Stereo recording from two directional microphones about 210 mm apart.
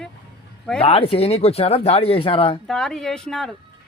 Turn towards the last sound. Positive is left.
turn(degrees=0)  # may be behind; listen again after turning